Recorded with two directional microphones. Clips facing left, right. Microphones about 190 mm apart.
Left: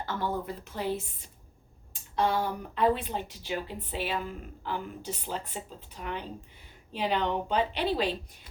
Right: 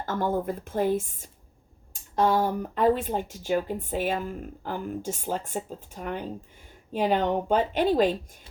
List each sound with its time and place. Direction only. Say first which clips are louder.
0.0 s speech: right 5 dB; 45° right (ahead or behind)